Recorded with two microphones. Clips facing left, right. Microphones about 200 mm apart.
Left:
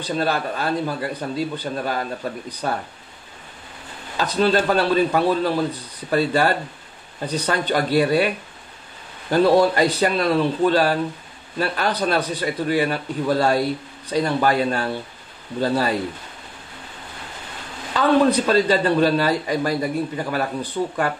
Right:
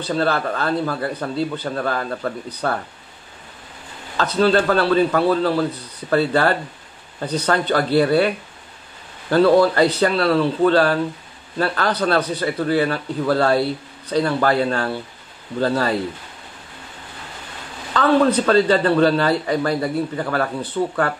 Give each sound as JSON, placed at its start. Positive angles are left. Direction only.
{"t": 0.0, "sound": "a man's voice", "side_deg": 15}
{"t": 4.2, "sound": "a man's voice", "side_deg": 15}
{"t": 9.3, "sound": "a man's voice", "side_deg": 15}
{"t": 17.9, "sound": "a man's voice", "side_deg": 15}